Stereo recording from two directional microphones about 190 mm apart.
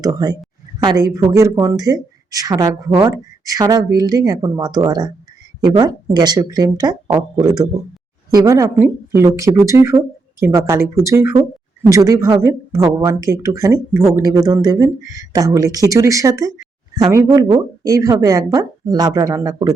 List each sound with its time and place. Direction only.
0.0 s speech: 20° right (ahead or behind)